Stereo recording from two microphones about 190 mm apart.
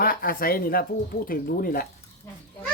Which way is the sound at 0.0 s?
50° left (ahead or behind).